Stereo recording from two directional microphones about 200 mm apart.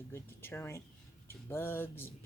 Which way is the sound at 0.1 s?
10° left (ahead or behind).